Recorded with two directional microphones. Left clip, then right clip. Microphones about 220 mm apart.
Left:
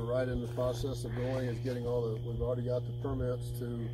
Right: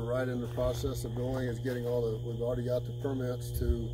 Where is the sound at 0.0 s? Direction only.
15° right (ahead or behind).